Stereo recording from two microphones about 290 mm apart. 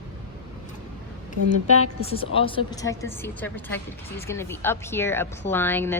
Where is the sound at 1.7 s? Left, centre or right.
Left.